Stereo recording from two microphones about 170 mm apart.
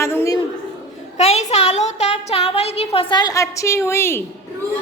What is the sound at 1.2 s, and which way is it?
A child's voice, 40° left (ahead or behind).